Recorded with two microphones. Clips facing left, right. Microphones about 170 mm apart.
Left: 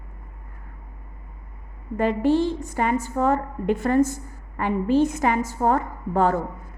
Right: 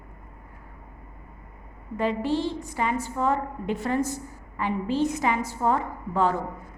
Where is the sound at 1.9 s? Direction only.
50° left (ahead or behind).